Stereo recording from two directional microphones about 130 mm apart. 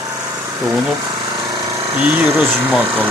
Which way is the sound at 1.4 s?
35° right (ahead or behind).